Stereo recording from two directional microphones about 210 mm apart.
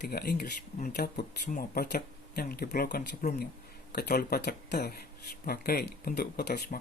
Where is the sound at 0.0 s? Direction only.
50° left (ahead or behind).